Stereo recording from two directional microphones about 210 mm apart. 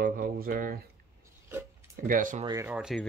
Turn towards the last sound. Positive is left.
turn(degrees=0)  # may be behind; listen again after turning